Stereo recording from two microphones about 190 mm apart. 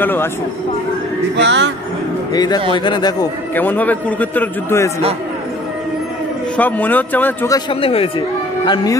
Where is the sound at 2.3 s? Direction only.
20° left (ahead or behind).